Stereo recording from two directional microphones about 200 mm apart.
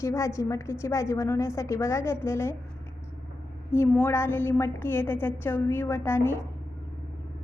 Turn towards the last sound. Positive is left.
turn(degrees=10)  # may be behind; listen again after turning